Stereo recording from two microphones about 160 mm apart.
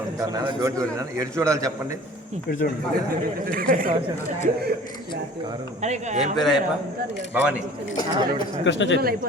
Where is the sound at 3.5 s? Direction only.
60° right (ahead or behind).